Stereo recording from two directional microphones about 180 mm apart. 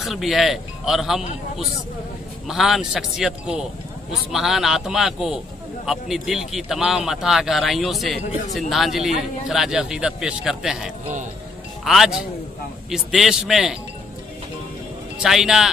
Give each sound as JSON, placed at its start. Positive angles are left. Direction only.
{"t": 0.0, "sound": "a man's voice", "side_deg": 0}
{"t": 2.4, "sound": "a man's voice", "side_deg": 0}
{"t": 15.2, "sound": "a man's voice", "side_deg": 0}